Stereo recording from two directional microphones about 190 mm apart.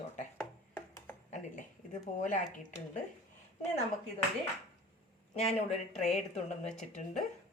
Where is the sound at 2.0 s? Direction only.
40° left (ahead or behind).